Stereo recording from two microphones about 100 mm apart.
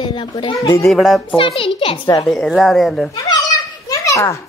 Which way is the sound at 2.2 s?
Centre (ahead or behind).